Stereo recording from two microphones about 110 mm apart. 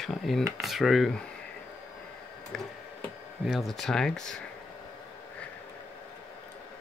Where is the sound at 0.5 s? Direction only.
Centre (ahead or behind).